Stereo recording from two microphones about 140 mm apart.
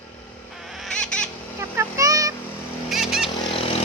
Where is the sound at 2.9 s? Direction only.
5° right (ahead or behind).